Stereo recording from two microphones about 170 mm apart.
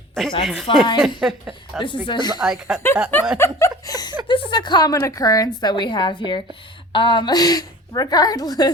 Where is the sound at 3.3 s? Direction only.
15° left (ahead or behind).